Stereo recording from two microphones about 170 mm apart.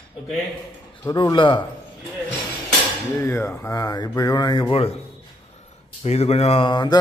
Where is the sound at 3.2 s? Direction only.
15° left (ahead or behind); by 4.9 s 35° left (ahead or behind).